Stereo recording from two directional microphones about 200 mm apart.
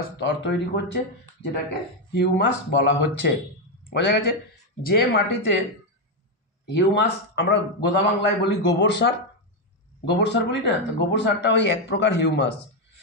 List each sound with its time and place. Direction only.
0.2 s a man's voice: 60° left (ahead or behind)
2.1 s a man's voice: 60° left (ahead or behind)
6.6 s a man's voice: 60° left (ahead or behind)